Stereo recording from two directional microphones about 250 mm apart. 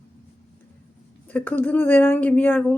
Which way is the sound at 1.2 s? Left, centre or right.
Centre.